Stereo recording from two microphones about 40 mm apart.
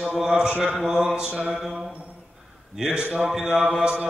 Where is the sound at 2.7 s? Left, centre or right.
Centre.